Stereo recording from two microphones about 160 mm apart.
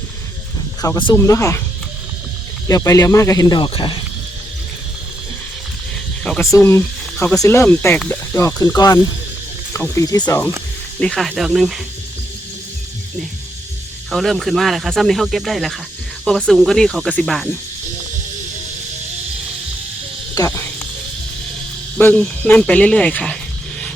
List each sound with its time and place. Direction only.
0.8 s speech: 25° left (ahead or behind)
2.6 s speech: 20° left (ahead or behind)
6.4 s speech: 20° left (ahead or behind)
11.0 s speech: 5° left (ahead or behind)
14.1 s speech: centre (ahead or behind)
20.3 s cricket: 15° left (ahead or behind)
21.9 s speech: 10° left (ahead or behind)